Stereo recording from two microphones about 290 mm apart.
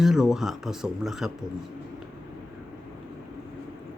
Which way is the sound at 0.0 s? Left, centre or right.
Centre.